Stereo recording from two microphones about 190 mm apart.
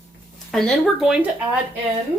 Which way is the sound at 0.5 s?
Centre (ahead or behind).